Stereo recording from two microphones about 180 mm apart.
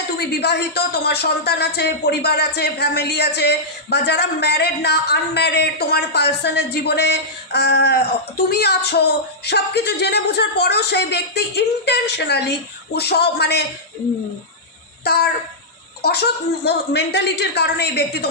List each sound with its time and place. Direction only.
0.2 s speech: 65° left (ahead or behind)
15.0 s speech: 65° left (ahead or behind)